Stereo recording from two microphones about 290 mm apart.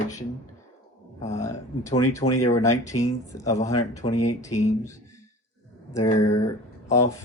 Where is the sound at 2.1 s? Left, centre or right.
Centre.